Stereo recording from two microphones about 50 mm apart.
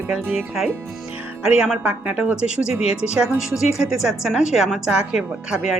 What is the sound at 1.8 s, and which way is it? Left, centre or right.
Speech, right.